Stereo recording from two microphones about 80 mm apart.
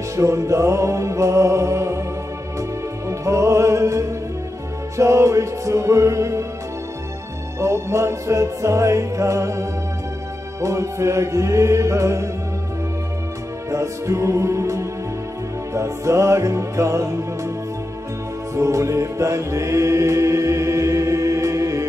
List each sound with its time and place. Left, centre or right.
0.1 s music: right
3.1 s music: right
7.6 s music: right
13.7 s music: right
18.5 s music: right